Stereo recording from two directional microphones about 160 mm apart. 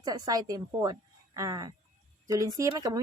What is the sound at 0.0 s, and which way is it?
A woman's voice, 25° right (ahead or behind).